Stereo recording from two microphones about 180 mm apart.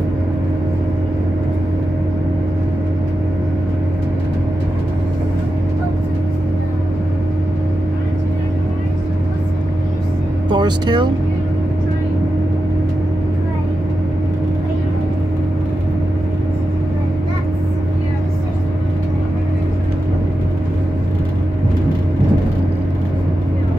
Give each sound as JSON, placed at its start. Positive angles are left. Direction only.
{"t": 10.5, "sound": "speech", "side_deg": -25}